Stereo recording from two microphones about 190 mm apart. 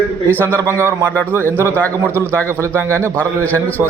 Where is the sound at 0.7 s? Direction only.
15° right (ahead or behind).